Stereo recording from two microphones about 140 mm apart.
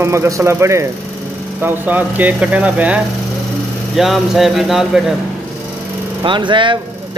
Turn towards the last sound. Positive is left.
turn(degrees=-35)  # may be behind; listen again after turning